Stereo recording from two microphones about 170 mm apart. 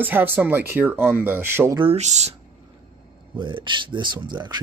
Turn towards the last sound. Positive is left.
turn(degrees=-25)  # may be behind; listen again after turning